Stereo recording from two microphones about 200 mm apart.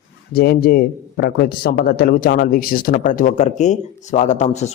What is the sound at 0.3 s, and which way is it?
Speech, 50° left (ahead or behind).